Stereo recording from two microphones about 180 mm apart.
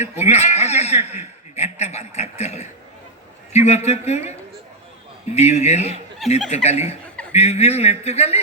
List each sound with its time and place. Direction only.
0.0 s chuckle: 40° left (ahead or behind)
3.5 s a man's voice: 35° left (ahead or behind)